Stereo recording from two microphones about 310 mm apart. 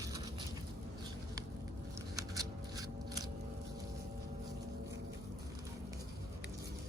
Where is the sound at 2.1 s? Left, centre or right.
Centre.